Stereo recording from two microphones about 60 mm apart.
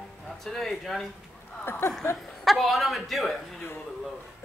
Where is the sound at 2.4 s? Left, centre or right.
Centre.